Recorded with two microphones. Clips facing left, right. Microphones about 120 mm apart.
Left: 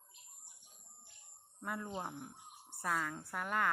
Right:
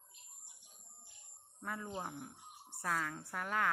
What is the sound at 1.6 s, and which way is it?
Speech, 5° left (ahead or behind).